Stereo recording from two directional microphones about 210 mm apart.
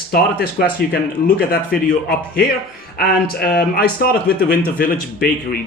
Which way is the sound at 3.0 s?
45° left (ahead or behind).